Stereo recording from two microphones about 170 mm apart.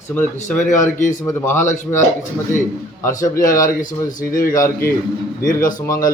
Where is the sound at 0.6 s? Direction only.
50° left (ahead or behind).